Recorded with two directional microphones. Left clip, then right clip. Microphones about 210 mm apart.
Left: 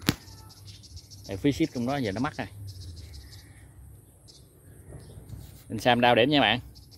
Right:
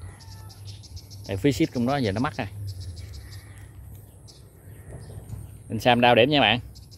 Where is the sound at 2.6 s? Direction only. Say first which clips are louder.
Right 3 dB; 25° right (ahead or behind).